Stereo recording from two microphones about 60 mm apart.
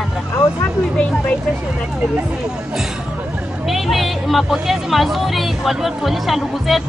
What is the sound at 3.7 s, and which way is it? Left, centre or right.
Speech, centre.